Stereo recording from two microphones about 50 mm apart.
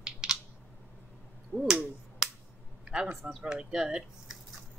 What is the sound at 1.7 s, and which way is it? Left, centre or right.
Finger snapping, centre.